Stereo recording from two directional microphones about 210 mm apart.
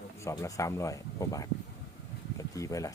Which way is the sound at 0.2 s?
15° left (ahead or behind).